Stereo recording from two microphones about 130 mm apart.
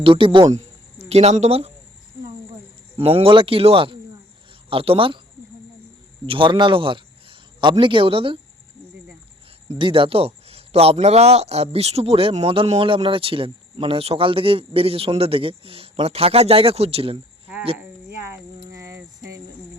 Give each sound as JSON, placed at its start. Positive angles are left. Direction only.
{"t": 0.0, "sound": "speech", "side_deg": -40}
{"t": 0.5, "sound": "speech", "side_deg": -55}
{"t": 3.0, "sound": "speech", "side_deg": -50}
{"t": 6.2, "sound": "speech", "side_deg": -40}
{"t": 9.7, "sound": "speech", "side_deg": -40}
{"t": 18.7, "sound": "a sound", "side_deg": -25}